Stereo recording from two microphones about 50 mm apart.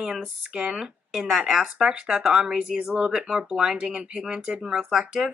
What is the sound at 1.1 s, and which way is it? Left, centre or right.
Speech, centre.